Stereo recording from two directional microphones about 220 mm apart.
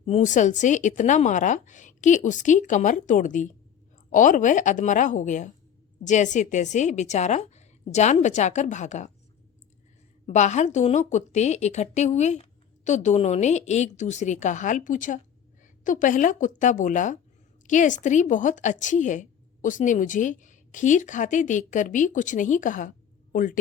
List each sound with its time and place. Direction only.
0.0 s a woman's voice: 30° left (ahead or behind)
10.2 s a woman's voice: 35° left (ahead or behind)